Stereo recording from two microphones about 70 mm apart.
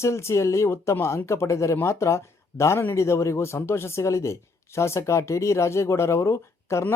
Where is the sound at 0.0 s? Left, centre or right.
Left.